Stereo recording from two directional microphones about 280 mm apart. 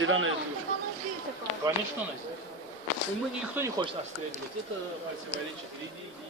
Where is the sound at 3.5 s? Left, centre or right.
Centre.